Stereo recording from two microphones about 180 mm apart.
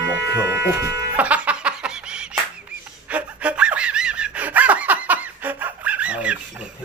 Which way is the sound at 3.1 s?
10° right (ahead or behind).